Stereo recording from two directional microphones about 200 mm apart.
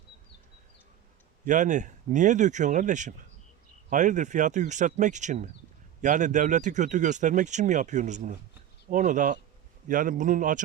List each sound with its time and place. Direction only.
1.5 s speech: 40° right (ahead or behind)